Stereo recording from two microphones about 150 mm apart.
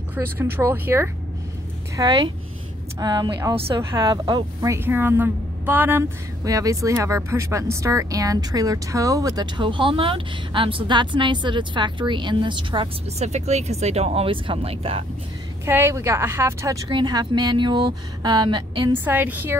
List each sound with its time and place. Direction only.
0.1 s a woman's voice: 15° right (ahead or behind)
2.0 s a woman's voice: 30° right (ahead or behind)
3.5 s speech: 40° right (ahead or behind)
3.9 s a woman's voice: 25° right (ahead or behind)
13.2 s speech: 50° right (ahead or behind)
15.6 s a woman's voice: 15° right (ahead or behind)
19.0 s a woman's voice: 10° right (ahead or behind)